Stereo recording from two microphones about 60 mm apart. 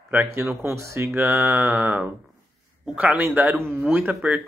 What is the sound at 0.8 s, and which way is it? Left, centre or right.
Speech, right.